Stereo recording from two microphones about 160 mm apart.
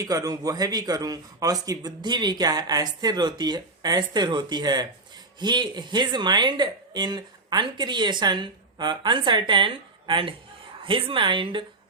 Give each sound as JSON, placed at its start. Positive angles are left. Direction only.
{"t": 0.0, "sound": "a woman's voice", "side_deg": -20}